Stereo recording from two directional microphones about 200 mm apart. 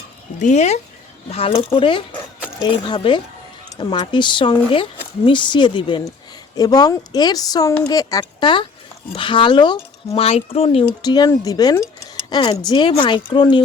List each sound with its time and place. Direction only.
0.3 s speech: 35° left (ahead or behind)